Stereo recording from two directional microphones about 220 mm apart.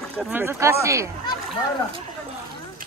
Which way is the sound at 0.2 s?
10° right (ahead or behind).